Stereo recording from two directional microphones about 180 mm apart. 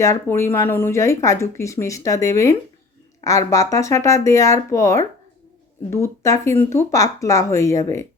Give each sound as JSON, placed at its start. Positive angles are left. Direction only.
{"t": 0.0, "sound": "speech", "side_deg": 15}